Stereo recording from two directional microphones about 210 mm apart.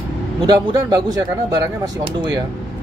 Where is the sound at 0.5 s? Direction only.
15° right (ahead or behind).